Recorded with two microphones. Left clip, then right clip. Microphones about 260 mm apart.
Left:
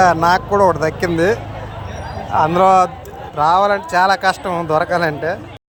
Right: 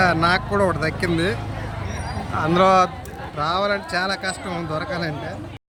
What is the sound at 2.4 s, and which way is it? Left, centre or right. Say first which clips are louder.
Speech: left 5 dB; centre.